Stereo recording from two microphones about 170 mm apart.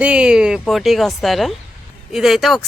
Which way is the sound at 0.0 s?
5° right (ahead or behind).